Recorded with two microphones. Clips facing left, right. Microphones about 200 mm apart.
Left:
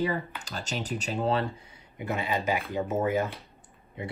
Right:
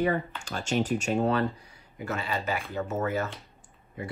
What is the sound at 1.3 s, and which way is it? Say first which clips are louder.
Speech: right 1 dB; 25° left (ahead or behind).